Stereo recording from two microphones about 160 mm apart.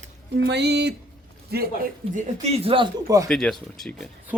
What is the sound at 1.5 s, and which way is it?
Speech, 80° right.